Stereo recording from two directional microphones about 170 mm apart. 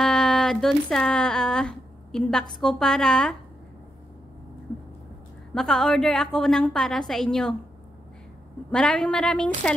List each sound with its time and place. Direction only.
0.0 s speech: 5° left (ahead or behind)
5.5 s a woman's voice: 5° left (ahead or behind)
8.6 s a woman's voice: 5° left (ahead or behind)